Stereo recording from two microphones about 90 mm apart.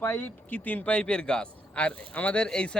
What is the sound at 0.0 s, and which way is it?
Speech, 20° left (ahead or behind).